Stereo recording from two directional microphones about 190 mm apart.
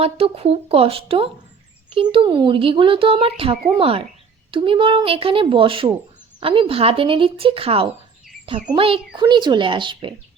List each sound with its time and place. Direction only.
0.0 s speech: 30° right (ahead or behind)